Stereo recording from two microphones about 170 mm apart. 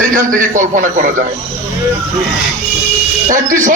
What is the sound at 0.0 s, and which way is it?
A man's voice, 50° right (ahead or behind).